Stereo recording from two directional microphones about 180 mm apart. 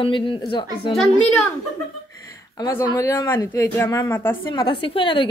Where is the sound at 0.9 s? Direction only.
5° left (ahead or behind).